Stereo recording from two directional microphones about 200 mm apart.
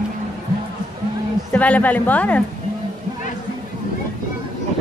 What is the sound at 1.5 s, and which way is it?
Speech, 10° left (ahead or behind).